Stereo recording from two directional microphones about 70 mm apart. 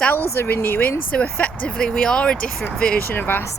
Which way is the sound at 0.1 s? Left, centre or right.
Left.